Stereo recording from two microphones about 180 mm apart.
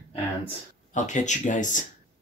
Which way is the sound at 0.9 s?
45° left (ahead or behind).